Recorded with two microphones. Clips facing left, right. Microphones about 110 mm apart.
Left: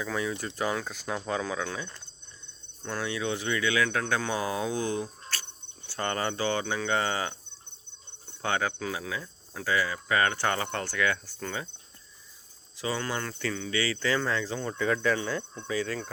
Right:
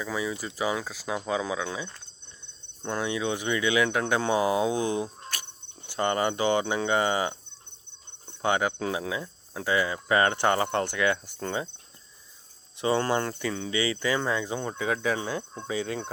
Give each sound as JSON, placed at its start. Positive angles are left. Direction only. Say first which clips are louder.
{"t": 0.0, "sound": "speech", "louder": "even", "side_deg": -5}
{"t": 8.3, "sound": "cricket", "louder": "right 4 dB", "side_deg": -15}
{"t": 8.8, "sound": "speech", "louder": "right 4 dB", "side_deg": -25}
{"t": 12.7, "sound": "speech", "louder": "right 7 dB", "side_deg": -25}
{"t": 15.5, "sound": "speech", "louder": "right 1 dB", "side_deg": -30}